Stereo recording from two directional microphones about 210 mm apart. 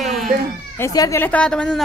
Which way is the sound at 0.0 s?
Centre (ahead or behind).